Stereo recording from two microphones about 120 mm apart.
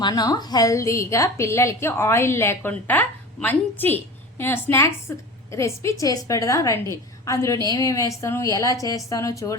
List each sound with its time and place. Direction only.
0.0 s a woman's voice: 35° left (ahead or behind)